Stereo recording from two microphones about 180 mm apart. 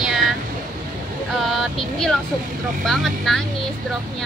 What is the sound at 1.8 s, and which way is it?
A woman's voice, centre (ahead or behind).